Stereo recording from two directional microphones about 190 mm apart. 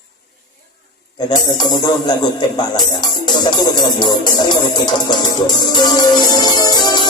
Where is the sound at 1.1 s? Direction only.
20° left (ahead or behind).